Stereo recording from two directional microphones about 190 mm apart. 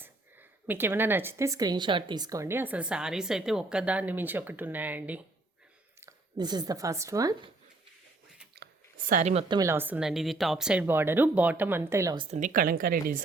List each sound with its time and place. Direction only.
0.0 s speech: 10° right (ahead or behind)
6.0 s speech: 20° right (ahead or behind)
8.5 s a sound: 50° right (ahead or behind); by 9.6 s 30° right (ahead or behind)
9.6 s speech: 15° right (ahead or behind)
12.4 s speech: 45° right (ahead or behind)